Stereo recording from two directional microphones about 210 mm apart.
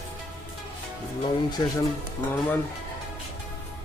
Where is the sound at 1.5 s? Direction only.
20° left (ahead or behind).